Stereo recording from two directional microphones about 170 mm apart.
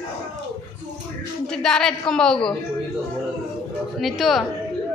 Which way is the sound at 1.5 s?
5° left (ahead or behind).